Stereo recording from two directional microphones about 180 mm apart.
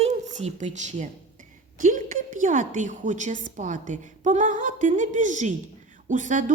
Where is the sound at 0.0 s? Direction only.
40° right (ahead or behind).